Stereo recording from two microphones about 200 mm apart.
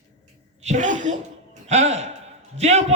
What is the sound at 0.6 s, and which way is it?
A man's voice, 35° right (ahead or behind).